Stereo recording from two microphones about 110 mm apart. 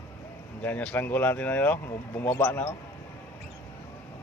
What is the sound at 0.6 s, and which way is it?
Speech, 15° left (ahead or behind).